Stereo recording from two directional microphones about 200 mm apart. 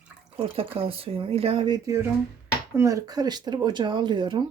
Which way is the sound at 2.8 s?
15° right (ahead or behind).